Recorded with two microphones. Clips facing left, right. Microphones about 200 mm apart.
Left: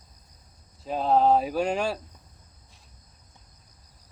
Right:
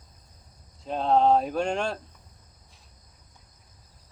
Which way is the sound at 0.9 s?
5° left (ahead or behind).